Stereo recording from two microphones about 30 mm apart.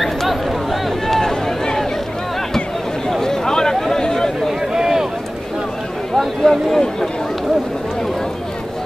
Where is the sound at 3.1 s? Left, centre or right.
Centre.